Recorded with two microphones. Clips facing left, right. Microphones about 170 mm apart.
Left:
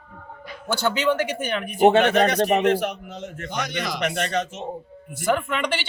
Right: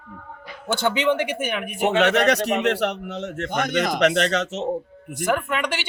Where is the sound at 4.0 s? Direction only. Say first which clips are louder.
Right 4 dB; 75° right (ahead or behind).